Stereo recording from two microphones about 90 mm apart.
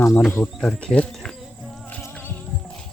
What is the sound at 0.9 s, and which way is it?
Speech, 10° left (ahead or behind).